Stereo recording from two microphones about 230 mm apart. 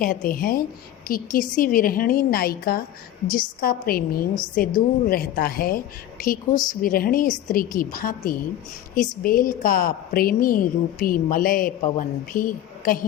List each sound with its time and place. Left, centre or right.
0.0 s a woman's voice: left